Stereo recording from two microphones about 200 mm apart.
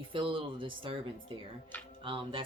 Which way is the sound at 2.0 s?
25° right (ahead or behind).